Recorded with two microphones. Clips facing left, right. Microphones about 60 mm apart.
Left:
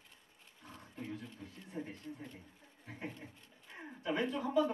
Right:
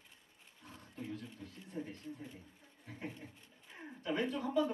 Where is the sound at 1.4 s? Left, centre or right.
Centre.